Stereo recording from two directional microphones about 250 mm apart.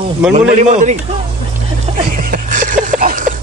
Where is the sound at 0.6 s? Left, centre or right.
Right.